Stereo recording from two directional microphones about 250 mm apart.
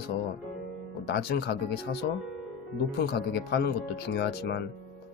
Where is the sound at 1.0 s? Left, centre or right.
Left.